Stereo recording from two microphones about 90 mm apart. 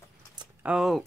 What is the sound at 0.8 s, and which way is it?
Speech, centre (ahead or behind).